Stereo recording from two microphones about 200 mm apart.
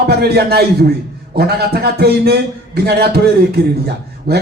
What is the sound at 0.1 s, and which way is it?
A man's voice, 50° right (ahead or behind).